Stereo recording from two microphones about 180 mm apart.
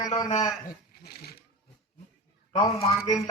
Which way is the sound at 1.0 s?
60° left (ahead or behind).